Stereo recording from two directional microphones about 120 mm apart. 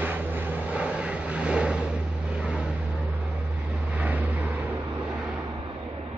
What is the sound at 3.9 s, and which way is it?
Vehicle, 10° right (ahead or behind).